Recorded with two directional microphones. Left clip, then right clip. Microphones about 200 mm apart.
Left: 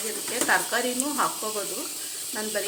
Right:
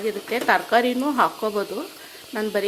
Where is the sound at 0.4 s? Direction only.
50° right (ahead or behind).